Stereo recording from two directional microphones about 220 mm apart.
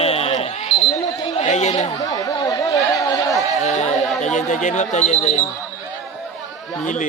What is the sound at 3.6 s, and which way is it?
Speech, 35° left (ahead or behind).